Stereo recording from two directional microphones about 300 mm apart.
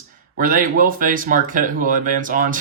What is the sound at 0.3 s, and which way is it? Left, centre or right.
Speech, right.